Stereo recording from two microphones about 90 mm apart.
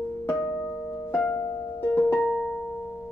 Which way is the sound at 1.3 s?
50° left (ahead or behind).